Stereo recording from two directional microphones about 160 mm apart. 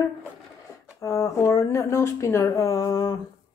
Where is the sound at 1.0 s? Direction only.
20° left (ahead or behind).